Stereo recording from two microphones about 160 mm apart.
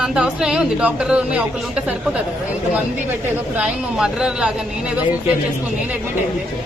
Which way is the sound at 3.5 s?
5° right (ahead or behind).